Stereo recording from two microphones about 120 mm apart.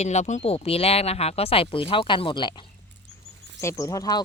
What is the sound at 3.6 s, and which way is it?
Speech, 25° left (ahead or behind).